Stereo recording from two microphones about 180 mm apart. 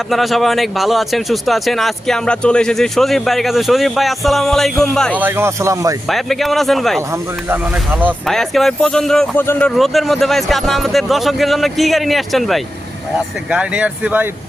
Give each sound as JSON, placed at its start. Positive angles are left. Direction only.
{"t": 0.1, "sound": "speech", "side_deg": 0}
{"t": 5.1, "sound": "speech", "side_deg": -10}
{"t": 6.1, "sound": "speech", "side_deg": 0}
{"t": 7.1, "sound": "speech", "side_deg": -10}
{"t": 8.3, "sound": "speech", "side_deg": 0}